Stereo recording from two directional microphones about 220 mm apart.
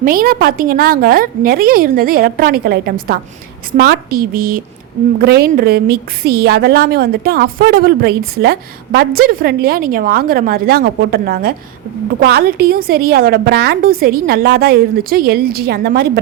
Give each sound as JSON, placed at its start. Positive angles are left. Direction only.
{"t": 0.0, "sound": "a woman's voice", "side_deg": -40}